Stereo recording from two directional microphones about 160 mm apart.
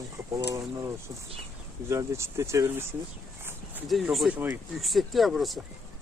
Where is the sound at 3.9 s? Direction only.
Centre (ahead or behind).